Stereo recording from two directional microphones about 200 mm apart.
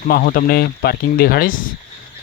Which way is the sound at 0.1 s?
50° left (ahead or behind).